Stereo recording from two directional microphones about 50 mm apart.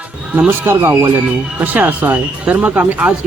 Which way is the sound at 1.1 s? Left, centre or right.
Right.